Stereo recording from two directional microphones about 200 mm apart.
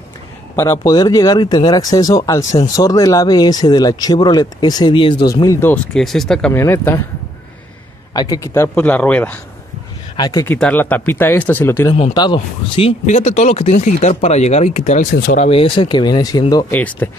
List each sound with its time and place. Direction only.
0.6 s speech: 15° left (ahead or behind)
8.1 s speech: 20° left (ahead or behind)
10.1 s speech: 20° left (ahead or behind)
11.9 s speech: 25° left (ahead or behind); by 15.4 s 45° left (ahead or behind)
15.4 s speech: 25° left (ahead or behind)
16.7 s speech: 10° left (ahead or behind)